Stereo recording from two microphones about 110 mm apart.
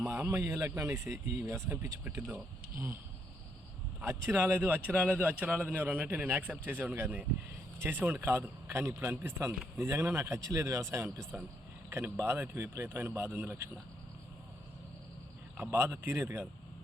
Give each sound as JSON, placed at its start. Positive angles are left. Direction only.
{"t": 0.1, "sound": "a man's voice", "side_deg": -25}
{"t": 4.0, "sound": "a man's voice", "side_deg": -25}
{"t": 15.5, "sound": "a man's voice", "side_deg": -20}